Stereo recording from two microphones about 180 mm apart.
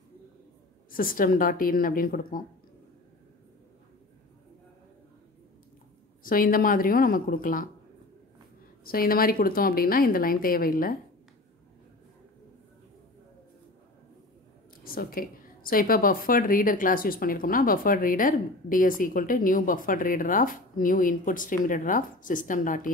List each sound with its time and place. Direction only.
0.9 s a woman's voice: 50° left (ahead or behind)
6.2 s a woman's voice: 50° left (ahead or behind)
8.8 s a woman's voice: 55° left (ahead or behind)
14.9 s a woman's voice: 55° left (ahead or behind)